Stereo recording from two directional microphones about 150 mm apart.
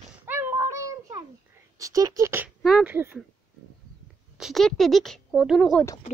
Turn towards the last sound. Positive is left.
turn(degrees=5)  # may be behind; listen again after turning